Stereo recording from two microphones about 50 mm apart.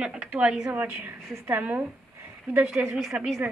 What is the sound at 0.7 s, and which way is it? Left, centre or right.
A woman's voice, right.